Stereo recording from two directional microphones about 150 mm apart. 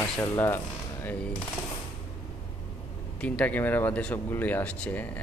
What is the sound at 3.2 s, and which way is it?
Speech, 10° left (ahead or behind).